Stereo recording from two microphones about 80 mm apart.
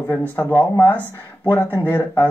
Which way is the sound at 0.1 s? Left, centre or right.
Centre.